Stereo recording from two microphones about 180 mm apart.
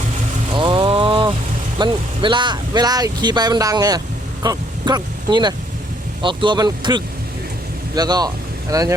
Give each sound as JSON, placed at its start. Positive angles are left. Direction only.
{"t": 0.5, "sound": "vehicle", "side_deg": -30}
{"t": 1.8, "sound": "speech", "side_deg": -25}